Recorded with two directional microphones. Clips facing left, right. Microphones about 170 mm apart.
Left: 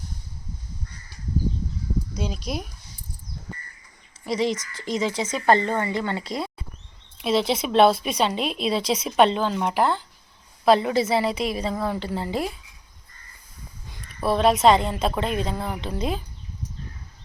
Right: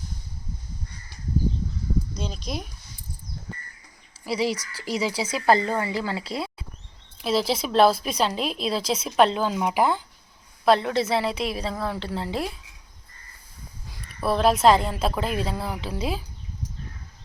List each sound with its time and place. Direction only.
2.1 s a woman's voice: 5° left (ahead or behind)
4.2 s speech: 5° right (ahead or behind)
4.5 s speech: 35° right (ahead or behind)
4.8 s a woman's voice: 10° right (ahead or behind)
10.7 s a woman's voice: centre (ahead or behind)
13.8 s a woman's voice: centre (ahead or behind)